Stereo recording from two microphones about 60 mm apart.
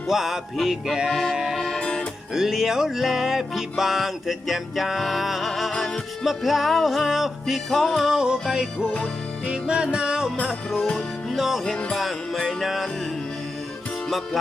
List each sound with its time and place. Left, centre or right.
0.1 s music: centre
1.8 s music: centre
2.3 s music: centre
8.0 s music: centre